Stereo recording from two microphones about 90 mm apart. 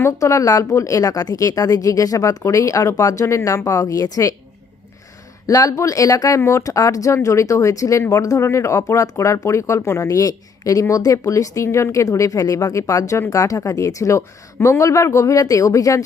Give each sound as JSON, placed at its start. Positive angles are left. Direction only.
{"t": 0.0, "sound": "speech", "side_deg": 35}
{"t": 5.5, "sound": "speech", "side_deg": 40}